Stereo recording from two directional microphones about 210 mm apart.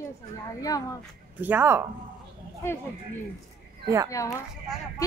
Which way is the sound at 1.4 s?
10° right (ahead or behind).